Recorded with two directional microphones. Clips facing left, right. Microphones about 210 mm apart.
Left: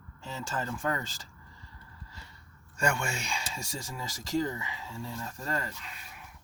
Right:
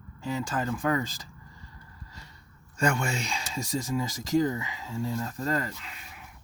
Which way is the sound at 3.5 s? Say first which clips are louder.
Right 10 dB; 20° right (ahead or behind).